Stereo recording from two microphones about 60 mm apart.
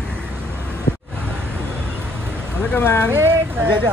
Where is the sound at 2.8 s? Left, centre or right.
Left.